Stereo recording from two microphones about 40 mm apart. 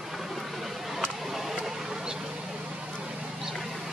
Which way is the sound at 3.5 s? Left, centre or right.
Centre.